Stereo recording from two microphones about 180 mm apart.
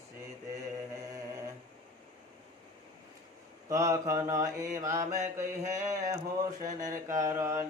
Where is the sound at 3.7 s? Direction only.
20° right (ahead or behind).